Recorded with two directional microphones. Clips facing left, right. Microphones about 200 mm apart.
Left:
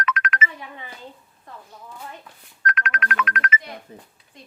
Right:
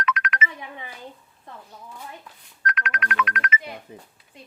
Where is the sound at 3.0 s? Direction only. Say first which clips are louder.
Even; 45° left (ahead or behind).